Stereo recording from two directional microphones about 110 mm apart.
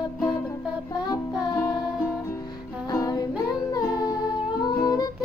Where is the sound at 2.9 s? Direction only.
35° left (ahead or behind).